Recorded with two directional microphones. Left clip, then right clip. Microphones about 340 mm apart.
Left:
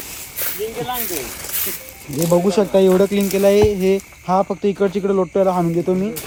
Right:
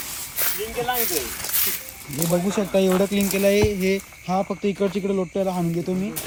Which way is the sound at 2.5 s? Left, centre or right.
Centre.